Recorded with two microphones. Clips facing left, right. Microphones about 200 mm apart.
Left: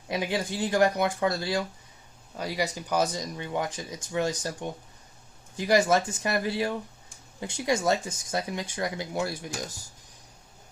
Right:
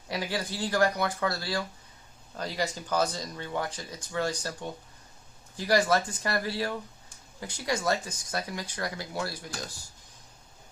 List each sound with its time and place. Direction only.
0.1 s speech: 20° left (ahead or behind)